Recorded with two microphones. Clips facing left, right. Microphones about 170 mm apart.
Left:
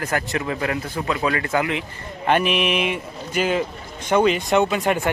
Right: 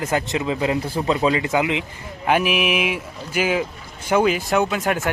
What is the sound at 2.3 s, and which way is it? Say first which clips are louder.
Speech: even; 5° right (ahead or behind).